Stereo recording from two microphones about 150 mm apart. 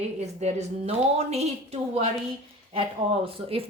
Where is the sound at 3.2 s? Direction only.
40° right (ahead or behind).